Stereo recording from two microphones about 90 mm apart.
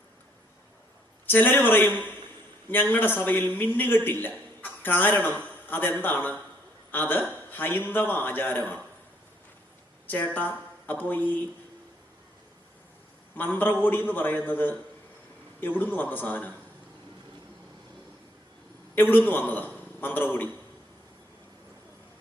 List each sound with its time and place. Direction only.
1.3 s a man's voice: 20° left (ahead or behind)
10.1 s speech: 20° left (ahead or behind)
13.3 s a man's voice: 20° left (ahead or behind)
18.9 s a man's voice: 20° left (ahead or behind)